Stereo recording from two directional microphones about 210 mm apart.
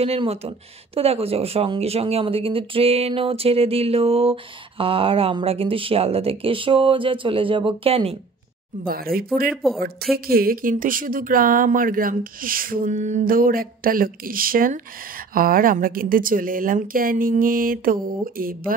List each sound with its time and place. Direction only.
0.0 s speech: 30° right (ahead or behind)
8.8 s speech: 45° right (ahead or behind)
9.5 s speech: centre (ahead or behind)
10.1 s speech: 45° right (ahead or behind)